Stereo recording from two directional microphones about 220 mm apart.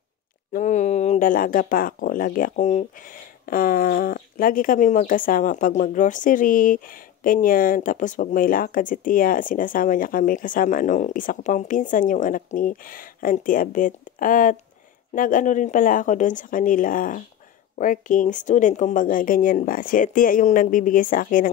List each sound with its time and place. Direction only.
0.5 s speech: 35° left (ahead or behind)